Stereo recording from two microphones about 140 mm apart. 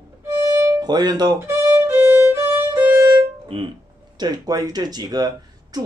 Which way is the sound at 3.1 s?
40° right (ahead or behind).